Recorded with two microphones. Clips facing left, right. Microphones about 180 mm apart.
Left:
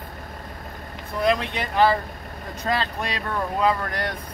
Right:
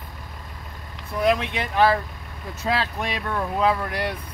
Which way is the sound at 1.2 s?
Centre (ahead or behind).